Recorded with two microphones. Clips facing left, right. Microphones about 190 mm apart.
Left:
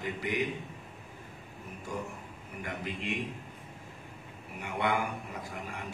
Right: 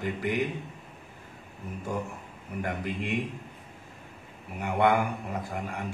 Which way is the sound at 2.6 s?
55° right (ahead or behind).